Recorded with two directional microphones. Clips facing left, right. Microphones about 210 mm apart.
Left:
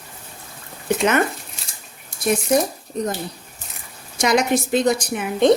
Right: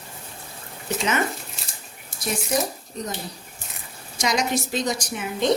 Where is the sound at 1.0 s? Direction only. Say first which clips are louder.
Left 6 dB; 55° left (ahead or behind).